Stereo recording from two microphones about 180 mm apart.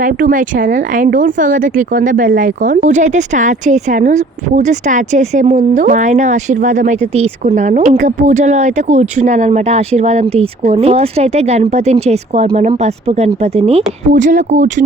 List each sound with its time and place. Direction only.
0.0 s speech: 50° right (ahead or behind)